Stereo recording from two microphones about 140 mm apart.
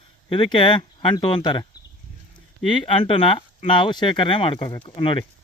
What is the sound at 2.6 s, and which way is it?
Speech, 35° left (ahead or behind).